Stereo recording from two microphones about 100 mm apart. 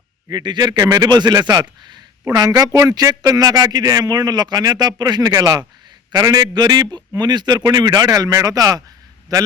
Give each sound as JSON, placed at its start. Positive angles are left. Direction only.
{"t": 0.3, "sound": "speech", "side_deg": -45}